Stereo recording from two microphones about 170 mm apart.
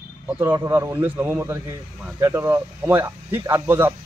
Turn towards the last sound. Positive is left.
turn(degrees=-15)  # may be behind; listen again after turning